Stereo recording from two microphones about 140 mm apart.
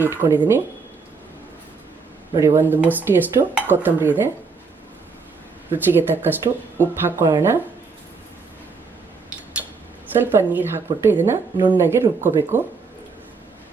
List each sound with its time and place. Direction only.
0.0 s speech: 15° right (ahead or behind)
2.3 s speech: 20° right (ahead or behind)
5.7 s speech: 15° right (ahead or behind)
10.1 s speech: 15° right (ahead or behind)